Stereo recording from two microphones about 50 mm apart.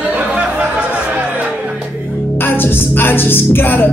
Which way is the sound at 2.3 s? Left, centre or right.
Left.